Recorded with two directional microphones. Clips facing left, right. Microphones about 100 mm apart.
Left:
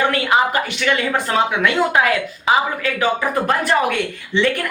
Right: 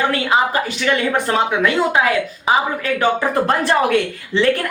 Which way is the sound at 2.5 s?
30° right (ahead or behind).